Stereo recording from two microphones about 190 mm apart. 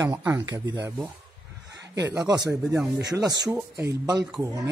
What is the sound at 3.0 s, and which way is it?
Speech, 60° right (ahead or behind).